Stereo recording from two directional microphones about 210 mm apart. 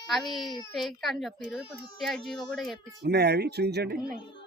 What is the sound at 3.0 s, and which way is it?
Speech, 50° right (ahead or behind).